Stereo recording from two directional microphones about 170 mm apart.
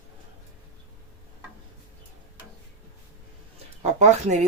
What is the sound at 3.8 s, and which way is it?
Speech, 45° right (ahead or behind).